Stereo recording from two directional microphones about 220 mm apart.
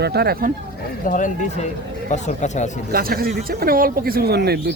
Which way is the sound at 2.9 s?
40° right (ahead or behind).